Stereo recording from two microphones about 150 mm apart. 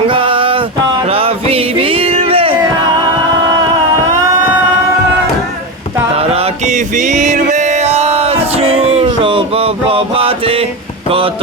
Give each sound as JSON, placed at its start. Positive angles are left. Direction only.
{"t": 0.1, "sound": "a sound", "side_deg": -35}
{"t": 1.0, "sound": "music", "side_deg": -40}
{"t": 6.1, "sound": "music", "side_deg": -40}